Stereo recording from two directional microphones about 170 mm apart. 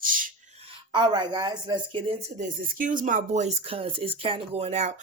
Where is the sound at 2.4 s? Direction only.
55° right (ahead or behind).